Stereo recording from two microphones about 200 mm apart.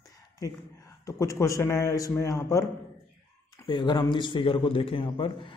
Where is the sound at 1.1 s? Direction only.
15° left (ahead or behind).